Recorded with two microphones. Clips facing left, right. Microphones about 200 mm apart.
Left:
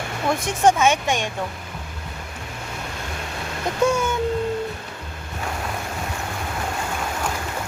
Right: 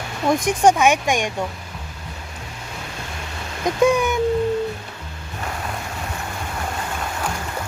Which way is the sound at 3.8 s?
15° right (ahead or behind).